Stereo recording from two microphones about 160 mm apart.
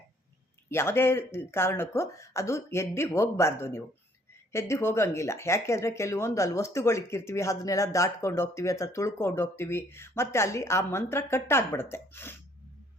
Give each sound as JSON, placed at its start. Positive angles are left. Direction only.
{"t": 0.7, "sound": "speech", "side_deg": 15}